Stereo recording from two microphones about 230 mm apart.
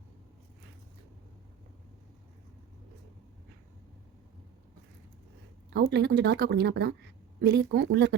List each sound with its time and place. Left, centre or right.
5.7 s a woman's voice: right